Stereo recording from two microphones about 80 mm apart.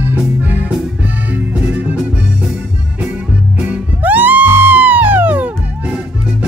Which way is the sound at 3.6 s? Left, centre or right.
Centre.